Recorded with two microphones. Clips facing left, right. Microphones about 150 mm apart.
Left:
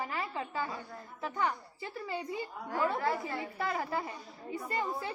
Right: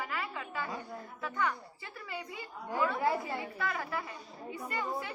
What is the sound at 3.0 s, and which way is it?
Speech, 20° right (ahead or behind).